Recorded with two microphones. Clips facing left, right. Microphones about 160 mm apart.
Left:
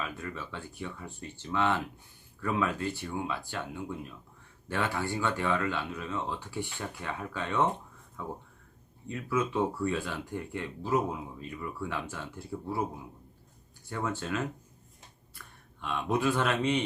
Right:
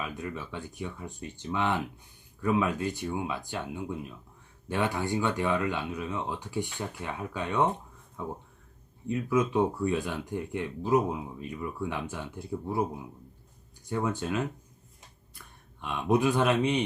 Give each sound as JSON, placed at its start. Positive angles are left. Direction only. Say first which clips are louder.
{"t": 0.0, "sound": "speech", "louder": "right 2 dB", "side_deg": -15}
{"t": 9.0, "sound": "speech", "louder": "right 4 dB", "side_deg": -20}
{"t": 13.8, "sound": "speech", "louder": "right 4 dB", "side_deg": -20}